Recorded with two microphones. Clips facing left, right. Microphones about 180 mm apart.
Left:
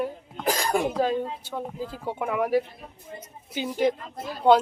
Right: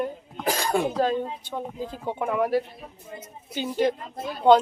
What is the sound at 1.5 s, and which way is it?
Speech, 15° right (ahead or behind).